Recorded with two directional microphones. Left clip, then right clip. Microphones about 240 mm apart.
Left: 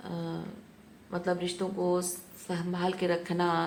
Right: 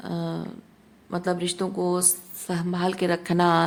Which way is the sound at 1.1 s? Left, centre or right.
Right.